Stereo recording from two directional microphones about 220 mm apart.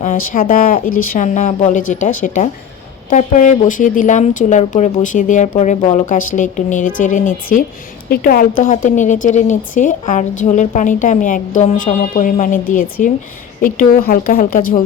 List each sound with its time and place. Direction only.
0.0 s speech: 40° left (ahead or behind)